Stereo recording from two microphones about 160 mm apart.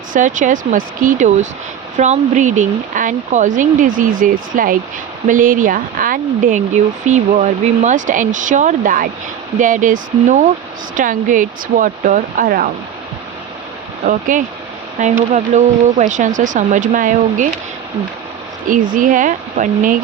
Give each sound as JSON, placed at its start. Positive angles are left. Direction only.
{"t": 0.1, "sound": "speech", "side_deg": -55}
{"t": 7.1, "sound": "speech", "side_deg": -45}
{"t": 14.1, "sound": "speech", "side_deg": -55}
{"t": 18.7, "sound": "speech", "side_deg": -55}